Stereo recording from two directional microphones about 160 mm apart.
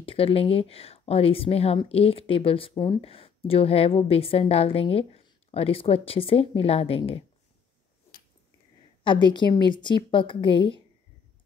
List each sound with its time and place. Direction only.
0.0 s a woman's voice: 35° left (ahead or behind)
9.0 s a woman's voice: 30° left (ahead or behind)